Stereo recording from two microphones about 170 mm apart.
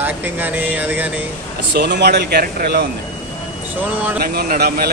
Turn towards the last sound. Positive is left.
turn(degrees=-65)  # may be behind; listen again after turning